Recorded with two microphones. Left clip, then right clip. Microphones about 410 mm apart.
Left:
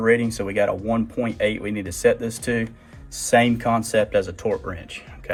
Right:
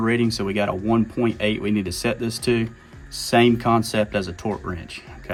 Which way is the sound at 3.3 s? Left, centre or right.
Centre.